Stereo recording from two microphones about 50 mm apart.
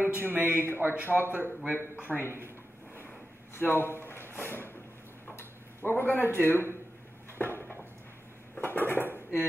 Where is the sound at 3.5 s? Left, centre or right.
Left.